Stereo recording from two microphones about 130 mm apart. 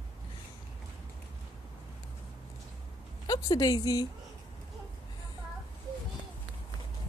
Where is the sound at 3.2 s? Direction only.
30° left (ahead or behind).